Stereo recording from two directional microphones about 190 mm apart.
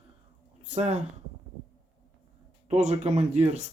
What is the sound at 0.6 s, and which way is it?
Speech, 35° right (ahead or behind).